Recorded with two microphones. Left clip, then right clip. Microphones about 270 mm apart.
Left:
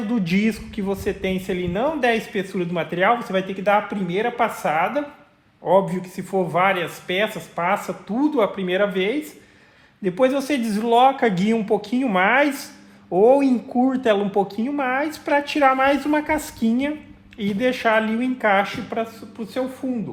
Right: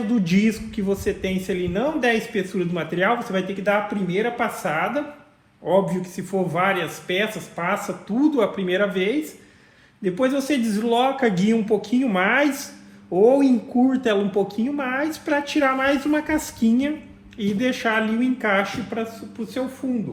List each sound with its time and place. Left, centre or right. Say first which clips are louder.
0.1 s speech: even; left